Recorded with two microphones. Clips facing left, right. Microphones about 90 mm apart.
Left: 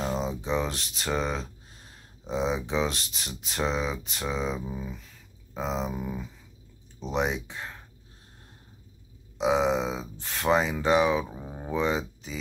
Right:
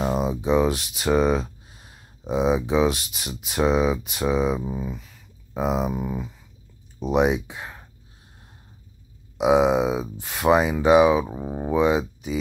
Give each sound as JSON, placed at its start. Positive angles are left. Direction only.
{"t": 0.0, "sound": "speech", "side_deg": -15}
{"t": 4.6, "sound": "speech", "side_deg": -20}
{"t": 4.8, "sound": "speech", "side_deg": -10}
{"t": 9.4, "sound": "speech", "side_deg": -15}
{"t": 11.2, "sound": "speech", "side_deg": -25}
{"t": 11.7, "sound": "speech", "side_deg": -10}